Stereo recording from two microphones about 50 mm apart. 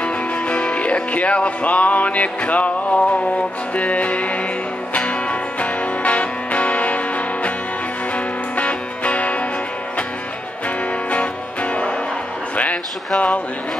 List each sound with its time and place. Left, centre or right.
0.0 s music: left
8.5 s music: left
11.1 s music: left